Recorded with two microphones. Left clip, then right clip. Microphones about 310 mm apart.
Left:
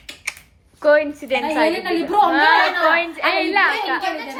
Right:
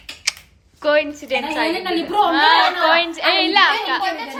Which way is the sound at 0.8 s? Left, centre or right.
Centre.